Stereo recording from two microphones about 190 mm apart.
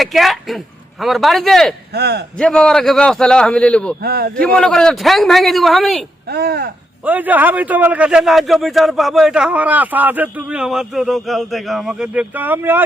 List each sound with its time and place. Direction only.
0.0 s speech: centre (ahead or behind)
1.9 s a man's voice: 60° right (ahead or behind)
2.4 s a man's voice: 5° left (ahead or behind)
4.0 s a man's voice: 55° right (ahead or behind)
4.4 s a man's voice: 5° left (ahead or behind)
6.2 s a man's voice: 55° right (ahead or behind)
7.0 s a man's voice: 10° right (ahead or behind)